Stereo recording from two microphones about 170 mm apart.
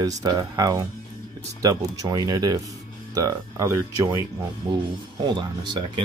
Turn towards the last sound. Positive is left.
turn(degrees=-25)  # may be behind; listen again after turning